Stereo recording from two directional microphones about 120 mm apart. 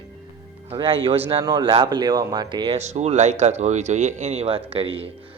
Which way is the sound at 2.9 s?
65° right (ahead or behind).